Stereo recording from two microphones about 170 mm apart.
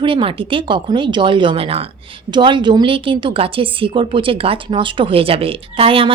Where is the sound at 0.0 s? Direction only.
30° right (ahead or behind).